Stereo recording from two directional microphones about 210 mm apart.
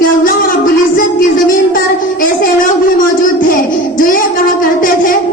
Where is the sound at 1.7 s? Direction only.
40° left (ahead or behind).